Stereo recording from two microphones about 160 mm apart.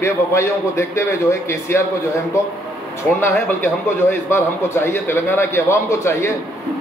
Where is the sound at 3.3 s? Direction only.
15° left (ahead or behind).